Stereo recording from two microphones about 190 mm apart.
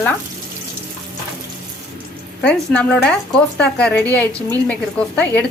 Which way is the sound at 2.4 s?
5° left (ahead or behind).